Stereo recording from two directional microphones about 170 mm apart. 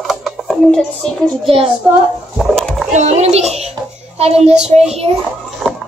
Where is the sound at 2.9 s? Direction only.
45° right (ahead or behind).